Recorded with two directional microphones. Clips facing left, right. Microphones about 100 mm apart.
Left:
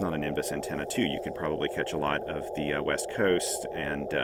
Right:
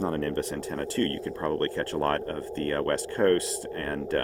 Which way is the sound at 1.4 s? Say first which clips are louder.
Right 3 dB; 50° right (ahead or behind).